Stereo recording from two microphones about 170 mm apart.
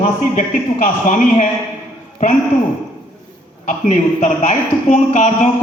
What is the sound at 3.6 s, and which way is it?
A woman's voice, 45° left (ahead or behind).